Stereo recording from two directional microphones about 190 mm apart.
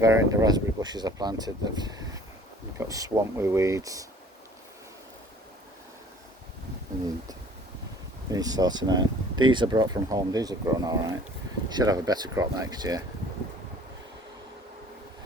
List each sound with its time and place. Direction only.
0.0 s speech: 15° right (ahead or behind)
8.3 s speech: 20° right (ahead or behind)